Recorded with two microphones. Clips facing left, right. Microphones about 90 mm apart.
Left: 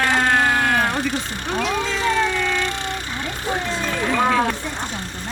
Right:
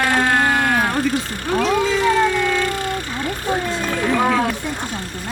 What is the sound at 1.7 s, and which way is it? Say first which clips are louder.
Cat: right 5 dB; 15° right (ahead or behind).